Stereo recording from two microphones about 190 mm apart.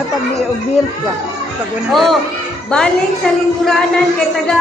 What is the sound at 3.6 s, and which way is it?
Speech, centre (ahead or behind).